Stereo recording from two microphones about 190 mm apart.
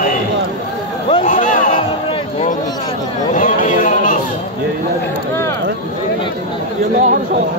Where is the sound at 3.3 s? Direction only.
45° left (ahead or behind).